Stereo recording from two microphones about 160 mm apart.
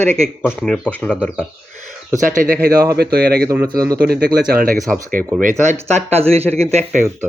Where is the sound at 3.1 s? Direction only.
75° right (ahead or behind).